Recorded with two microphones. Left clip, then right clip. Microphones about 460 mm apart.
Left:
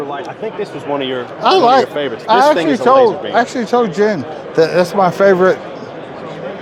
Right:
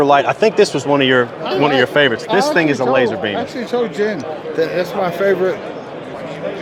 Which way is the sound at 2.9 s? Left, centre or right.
Left.